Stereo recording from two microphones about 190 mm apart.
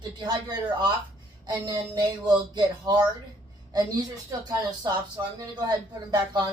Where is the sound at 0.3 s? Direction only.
20° right (ahead or behind).